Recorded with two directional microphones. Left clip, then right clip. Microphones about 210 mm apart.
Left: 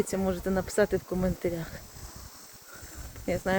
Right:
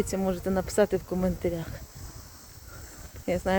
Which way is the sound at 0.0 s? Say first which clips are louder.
Right 1 dB; 10° right (ahead or behind).